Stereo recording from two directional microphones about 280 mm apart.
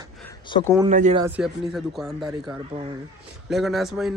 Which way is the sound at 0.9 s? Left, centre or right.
Right.